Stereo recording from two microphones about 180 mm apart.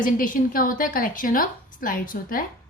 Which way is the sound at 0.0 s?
50° left (ahead or behind).